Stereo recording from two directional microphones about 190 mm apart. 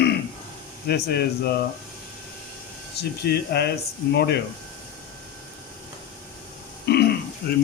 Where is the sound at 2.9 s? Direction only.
60° left (ahead or behind).